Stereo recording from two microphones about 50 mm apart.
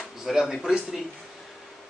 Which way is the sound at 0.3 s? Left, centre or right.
Centre.